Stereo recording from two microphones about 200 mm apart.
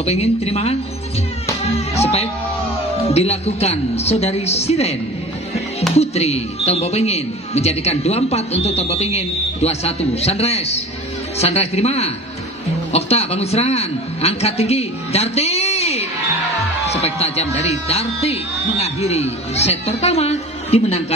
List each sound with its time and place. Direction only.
0.0 s speech: 30° left (ahead or behind)
2.0 s music: 30° left (ahead or behind)
3.1 s a man's voice: 30° left (ahead or behind)